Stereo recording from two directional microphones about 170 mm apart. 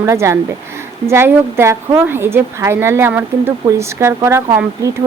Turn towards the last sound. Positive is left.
turn(degrees=-15)  # may be behind; listen again after turning